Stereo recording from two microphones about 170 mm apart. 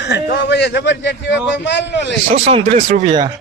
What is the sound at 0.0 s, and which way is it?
A man's voice, 85° left.